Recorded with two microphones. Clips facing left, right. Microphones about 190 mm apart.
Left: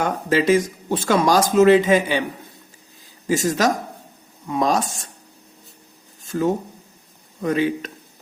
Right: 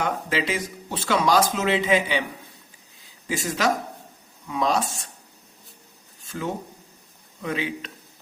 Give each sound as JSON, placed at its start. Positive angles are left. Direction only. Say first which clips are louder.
{"t": 0.0, "sound": "speech", "louder": "left 6 dB", "side_deg": 45}
{"t": 3.2, "sound": "speech", "louder": "left 5 dB", "side_deg": 45}
{"t": 6.2, "sound": "a sound", "louder": "left 10 dB", "side_deg": 40}
{"t": 7.4, "sound": "speech", "louder": "left 8 dB", "side_deg": 45}